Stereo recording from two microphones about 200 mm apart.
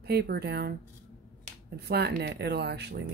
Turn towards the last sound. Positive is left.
turn(degrees=-55)  # may be behind; listen again after turning